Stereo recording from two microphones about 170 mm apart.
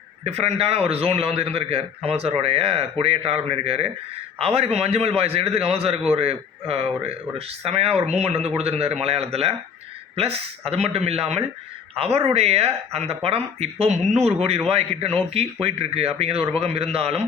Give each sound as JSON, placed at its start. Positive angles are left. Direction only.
{"t": 0.3, "sound": "a man's voice", "side_deg": -40}
{"t": 10.7, "sound": "a man's voice", "side_deg": -35}